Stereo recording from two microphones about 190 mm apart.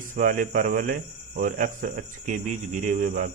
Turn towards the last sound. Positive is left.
turn(degrees=-45)  # may be behind; listen again after turning